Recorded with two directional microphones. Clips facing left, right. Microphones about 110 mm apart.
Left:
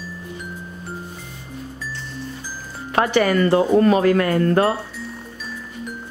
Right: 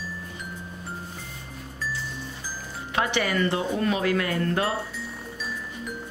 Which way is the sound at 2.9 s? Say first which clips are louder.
Left 8 dB; 45° left (ahead or behind).